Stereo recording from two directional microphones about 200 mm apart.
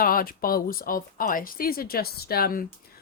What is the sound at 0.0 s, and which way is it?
A woman's voice, 45° left (ahead or behind).